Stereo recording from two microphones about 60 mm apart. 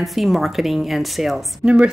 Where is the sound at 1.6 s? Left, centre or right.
Centre.